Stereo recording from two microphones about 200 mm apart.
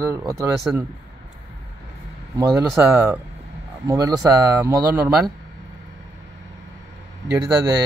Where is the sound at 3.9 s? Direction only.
20° right (ahead or behind).